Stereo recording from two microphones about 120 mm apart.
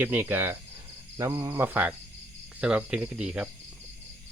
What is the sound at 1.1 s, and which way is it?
Cricket, 25° right (ahead or behind).